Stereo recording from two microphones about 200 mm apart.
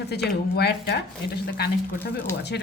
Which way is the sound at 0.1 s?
55° left (ahead or behind).